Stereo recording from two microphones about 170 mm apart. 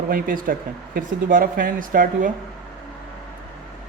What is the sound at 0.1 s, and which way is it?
Speech, 55° right (ahead or behind).